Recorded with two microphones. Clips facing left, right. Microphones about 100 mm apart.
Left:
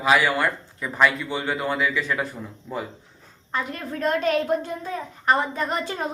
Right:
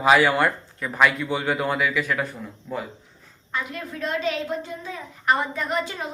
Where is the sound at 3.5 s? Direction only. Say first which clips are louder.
Left 2 dB; 45° left (ahead or behind).